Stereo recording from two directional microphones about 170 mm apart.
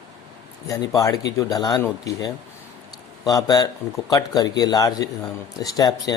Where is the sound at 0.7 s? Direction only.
20° left (ahead or behind).